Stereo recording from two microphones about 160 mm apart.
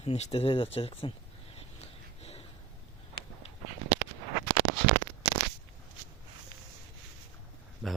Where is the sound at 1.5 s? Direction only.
40° left (ahead or behind).